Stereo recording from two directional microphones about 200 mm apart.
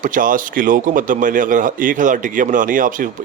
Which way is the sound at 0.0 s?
40° right (ahead or behind).